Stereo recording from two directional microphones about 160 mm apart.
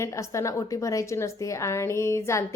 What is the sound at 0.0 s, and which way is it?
A woman's voice, 20° left (ahead or behind).